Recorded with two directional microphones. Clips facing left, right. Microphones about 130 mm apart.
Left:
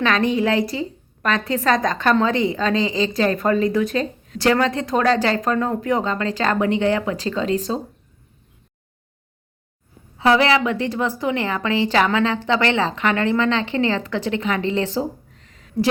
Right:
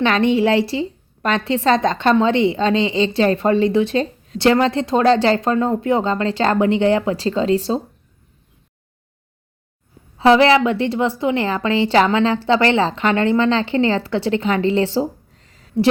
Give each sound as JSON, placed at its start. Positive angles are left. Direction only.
{"t": 0.0, "sound": "a woman's voice", "side_deg": -25}
{"t": 10.2, "sound": "a woman's voice", "side_deg": -30}